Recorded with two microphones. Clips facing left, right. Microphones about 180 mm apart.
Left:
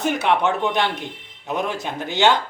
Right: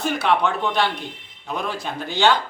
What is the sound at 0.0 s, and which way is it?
A man's voice, 20° left (ahead or behind).